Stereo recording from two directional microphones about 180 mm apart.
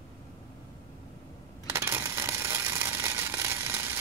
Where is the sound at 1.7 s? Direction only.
15° right (ahead or behind).